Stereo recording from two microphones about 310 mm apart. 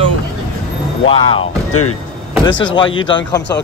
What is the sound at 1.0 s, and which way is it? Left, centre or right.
Speech, centre.